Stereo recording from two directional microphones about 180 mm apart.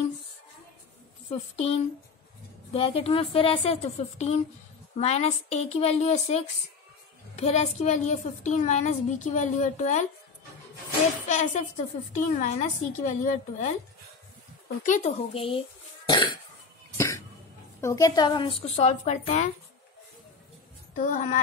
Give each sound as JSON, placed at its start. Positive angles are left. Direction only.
{"t": 1.3, "sound": "a woman's voice", "side_deg": 35}
{"t": 7.3, "sound": "a woman's voice", "side_deg": 40}
{"t": 11.2, "sound": "a woman's voice", "side_deg": 40}
{"t": 14.9, "sound": "a woman's voice", "side_deg": 40}
{"t": 16.1, "sound": "cough", "side_deg": 25}
{"t": 17.7, "sound": "a woman's voice", "side_deg": 15}
{"t": 20.9, "sound": "a woman's voice", "side_deg": 45}